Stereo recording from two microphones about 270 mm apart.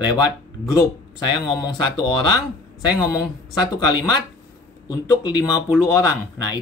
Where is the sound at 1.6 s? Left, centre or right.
Centre.